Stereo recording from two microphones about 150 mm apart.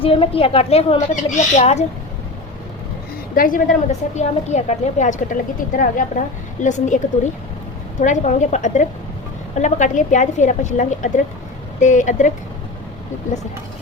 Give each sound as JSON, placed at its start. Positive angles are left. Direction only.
{"t": 0.0, "sound": "speech", "side_deg": 40}
{"t": 3.3, "sound": "a woman's voice", "side_deg": 65}